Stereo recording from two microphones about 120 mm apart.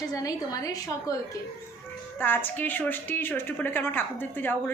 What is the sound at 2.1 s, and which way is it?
A woman's voice, 15° left (ahead or behind).